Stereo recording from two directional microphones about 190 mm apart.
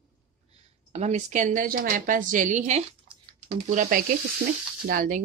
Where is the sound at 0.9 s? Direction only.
35° right (ahead or behind).